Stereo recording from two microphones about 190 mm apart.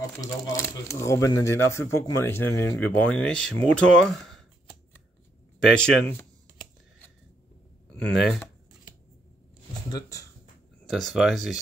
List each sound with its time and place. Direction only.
0.2 s speech: 15° left (ahead or behind)
5.6 s speech: 5° left (ahead or behind)
7.9 s speech: 5° left (ahead or behind)
9.8 s speech: 20° left (ahead or behind)
10.9 s speech: centre (ahead or behind)